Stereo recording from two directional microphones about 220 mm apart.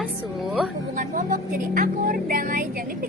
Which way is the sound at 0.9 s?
40° right (ahead or behind).